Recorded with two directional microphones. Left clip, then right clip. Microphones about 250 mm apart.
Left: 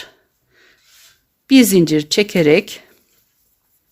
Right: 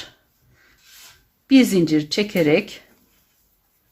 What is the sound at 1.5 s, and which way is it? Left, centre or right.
Speech, left.